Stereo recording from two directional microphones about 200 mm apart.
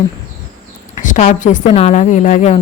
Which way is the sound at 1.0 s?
35° left (ahead or behind).